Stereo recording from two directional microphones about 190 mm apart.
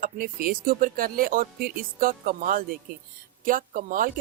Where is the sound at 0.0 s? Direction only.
50° right (ahead or behind).